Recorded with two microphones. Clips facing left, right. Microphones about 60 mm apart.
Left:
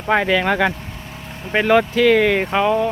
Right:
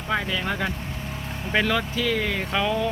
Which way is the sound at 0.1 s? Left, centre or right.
Left.